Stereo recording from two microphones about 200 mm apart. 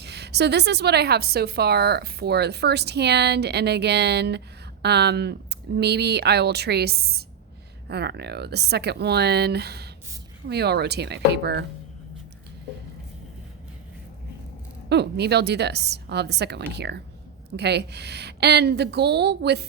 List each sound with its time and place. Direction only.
0.0 s a woman's voice: 55° right (ahead or behind)
14.8 s a woman's voice: 55° right (ahead or behind)